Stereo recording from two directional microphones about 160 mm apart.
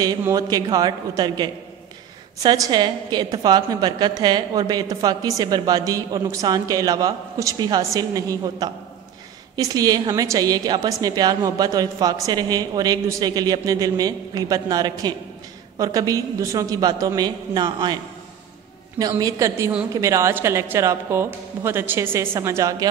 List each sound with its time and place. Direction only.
0.2 s a woman's voice: 20° right (ahead or behind)
18.9 s a woman's voice: 25° right (ahead or behind)